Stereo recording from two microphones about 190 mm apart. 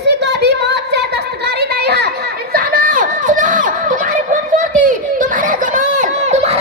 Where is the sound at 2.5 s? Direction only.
50° right (ahead or behind).